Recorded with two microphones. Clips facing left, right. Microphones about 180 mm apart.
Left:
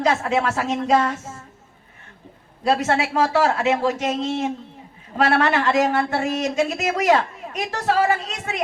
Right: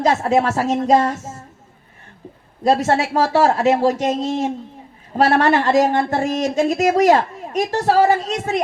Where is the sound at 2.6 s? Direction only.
35° right (ahead or behind).